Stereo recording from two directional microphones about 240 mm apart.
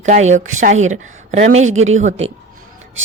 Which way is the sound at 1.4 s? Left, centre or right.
Right.